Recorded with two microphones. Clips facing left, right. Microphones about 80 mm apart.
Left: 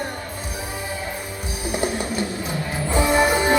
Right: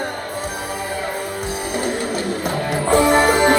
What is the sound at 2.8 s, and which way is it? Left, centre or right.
Music, right.